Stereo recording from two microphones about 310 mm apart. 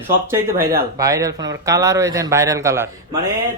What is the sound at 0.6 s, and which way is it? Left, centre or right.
Speech, right.